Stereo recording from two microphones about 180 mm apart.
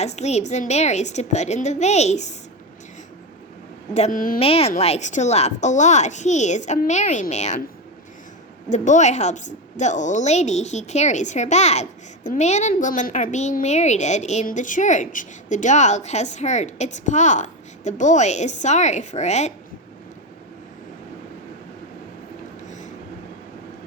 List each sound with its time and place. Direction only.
0.0 s a woman's voice: 40° left (ahead or behind)
3.9 s speech: 45° left (ahead or behind)
4.4 s a woman's voice: 35° left (ahead or behind)
8.7 s a woman's voice: 40° left (ahead or behind)